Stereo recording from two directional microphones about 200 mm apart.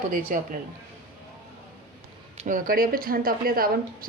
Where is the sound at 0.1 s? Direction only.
45° right (ahead or behind).